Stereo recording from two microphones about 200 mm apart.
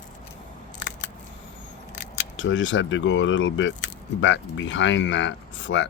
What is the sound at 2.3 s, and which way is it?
Speech, 70° left (ahead or behind).